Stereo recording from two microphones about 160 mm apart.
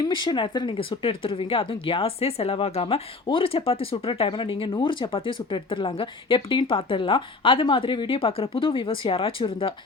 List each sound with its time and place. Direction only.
0.0 s speech: 30° left (ahead or behind)